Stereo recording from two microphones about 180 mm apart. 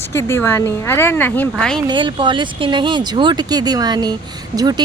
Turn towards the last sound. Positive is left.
turn(degrees=-20)  # may be behind; listen again after turning